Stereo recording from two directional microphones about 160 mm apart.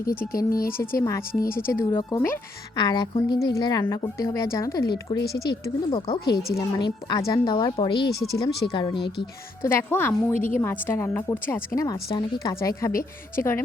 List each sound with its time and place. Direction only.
0.3 s speech: 65° left (ahead or behind)
0.9 s a woman's voice: 20° left (ahead or behind)
2.7 s a woman's voice: 25° left (ahead or behind)
5.2 s speech: 80° left
6.6 s a woman's voice: 30° left (ahead or behind)
8.3 s speech: 90° left
8.7 s a woman's voice: 30° left (ahead or behind)
9.6 s a woman's voice: 15° left (ahead or behind)